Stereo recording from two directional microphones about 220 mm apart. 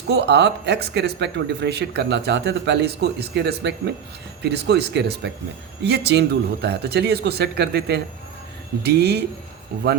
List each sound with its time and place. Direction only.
0.1 s speech: 50° right (ahead or behind)